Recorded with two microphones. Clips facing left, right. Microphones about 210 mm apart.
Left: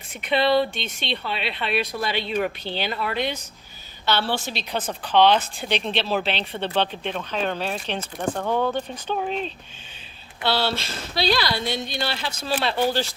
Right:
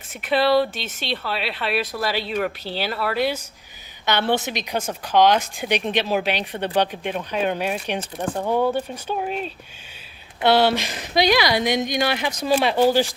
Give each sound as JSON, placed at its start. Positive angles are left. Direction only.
{"t": 0.1, "sound": "speech", "side_deg": 0}
{"t": 4.0, "sound": "speech", "side_deg": -20}
{"t": 10.4, "sound": "speech", "side_deg": -20}